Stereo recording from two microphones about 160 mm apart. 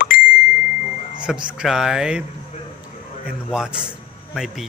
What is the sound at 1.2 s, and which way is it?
A man's voice, 5° right (ahead or behind).